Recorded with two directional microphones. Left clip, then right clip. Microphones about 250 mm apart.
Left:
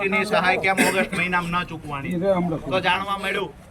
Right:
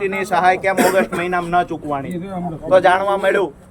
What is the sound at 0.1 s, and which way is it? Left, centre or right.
A man's voice, centre.